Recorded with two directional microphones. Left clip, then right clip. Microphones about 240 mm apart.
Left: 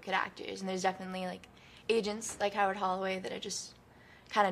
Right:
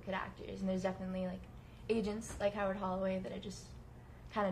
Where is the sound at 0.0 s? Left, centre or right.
Left.